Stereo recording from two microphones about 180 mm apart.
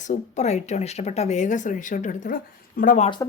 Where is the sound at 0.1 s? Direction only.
40° left (ahead or behind).